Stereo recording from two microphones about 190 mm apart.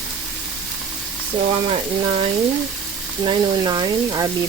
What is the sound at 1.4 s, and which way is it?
Speech, 30° right (ahead or behind).